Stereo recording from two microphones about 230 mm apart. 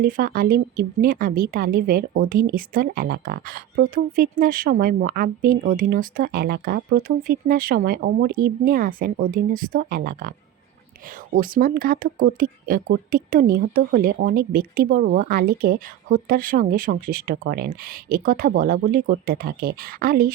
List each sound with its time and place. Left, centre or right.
0.0 s a woman's voice: right